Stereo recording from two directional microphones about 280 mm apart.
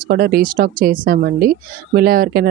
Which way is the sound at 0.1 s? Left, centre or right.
Right.